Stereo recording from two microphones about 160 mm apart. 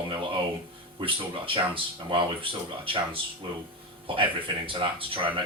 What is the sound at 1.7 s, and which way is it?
Speech, 30° right (ahead or behind).